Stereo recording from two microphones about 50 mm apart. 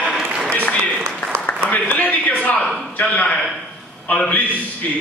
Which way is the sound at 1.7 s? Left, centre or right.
Left.